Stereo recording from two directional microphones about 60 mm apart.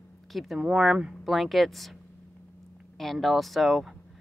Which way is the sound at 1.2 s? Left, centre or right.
Centre.